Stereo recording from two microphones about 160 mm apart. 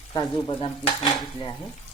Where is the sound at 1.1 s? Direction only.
25° left (ahead or behind).